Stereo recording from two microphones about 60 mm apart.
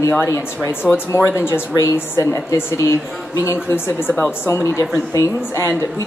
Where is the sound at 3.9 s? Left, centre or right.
Left.